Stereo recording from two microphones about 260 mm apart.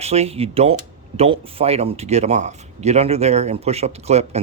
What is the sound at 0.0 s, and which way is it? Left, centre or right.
Speech, right.